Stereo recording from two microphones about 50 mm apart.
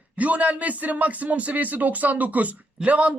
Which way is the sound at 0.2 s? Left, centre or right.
Right.